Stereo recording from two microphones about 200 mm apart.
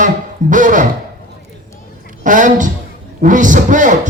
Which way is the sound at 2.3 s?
40° right (ahead or behind).